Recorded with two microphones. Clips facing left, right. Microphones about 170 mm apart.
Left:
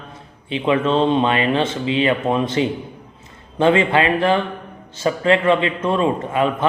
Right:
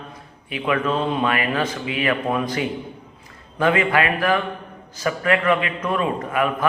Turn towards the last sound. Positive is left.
turn(degrees=25)  # may be behind; listen again after turning